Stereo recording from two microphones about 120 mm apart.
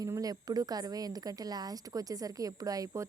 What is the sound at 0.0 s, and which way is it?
A woman's voice, 30° right (ahead or behind).